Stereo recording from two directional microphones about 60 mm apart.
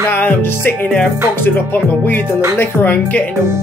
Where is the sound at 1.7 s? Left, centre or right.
Left.